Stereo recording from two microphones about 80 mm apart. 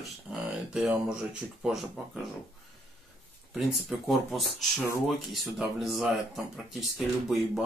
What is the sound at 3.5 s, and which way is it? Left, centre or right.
Speech, centre.